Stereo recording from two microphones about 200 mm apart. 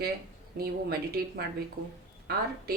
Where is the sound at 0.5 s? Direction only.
50° right (ahead or behind).